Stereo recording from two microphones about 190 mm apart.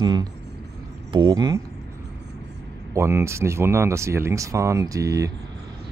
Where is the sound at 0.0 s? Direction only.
25° right (ahead or behind).